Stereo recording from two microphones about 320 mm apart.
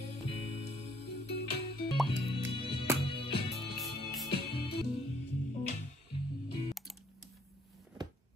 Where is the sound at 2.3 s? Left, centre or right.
Centre.